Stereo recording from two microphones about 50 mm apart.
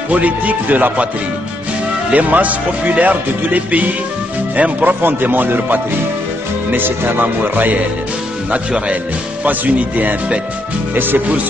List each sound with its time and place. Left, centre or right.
0.1 s speech: right
2.1 s speech: right
5.0 s speech: right
8.5 s speech: right